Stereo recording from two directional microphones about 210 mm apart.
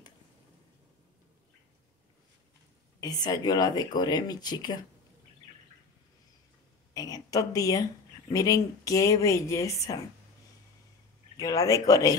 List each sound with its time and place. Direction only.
3.0 s speech: 20° left (ahead or behind)
6.9 s a sound: 15° left (ahead or behind)
8.3 s speech: 15° left (ahead or behind)
11.3 s speech: 15° left (ahead or behind)